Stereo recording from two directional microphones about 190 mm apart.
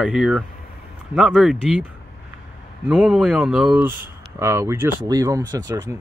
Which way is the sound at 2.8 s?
5° right (ahead or behind).